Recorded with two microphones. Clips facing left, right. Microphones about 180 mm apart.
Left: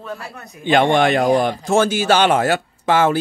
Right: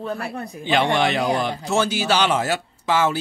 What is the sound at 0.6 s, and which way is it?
Speech, 50° left (ahead or behind).